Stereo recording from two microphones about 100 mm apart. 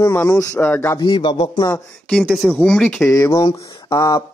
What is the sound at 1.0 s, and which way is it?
Speech, 50° left (ahead or behind).